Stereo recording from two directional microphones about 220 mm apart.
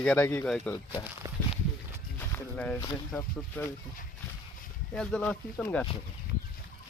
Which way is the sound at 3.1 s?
5° left (ahead or behind).